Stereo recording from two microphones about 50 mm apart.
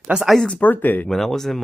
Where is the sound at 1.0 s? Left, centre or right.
Centre.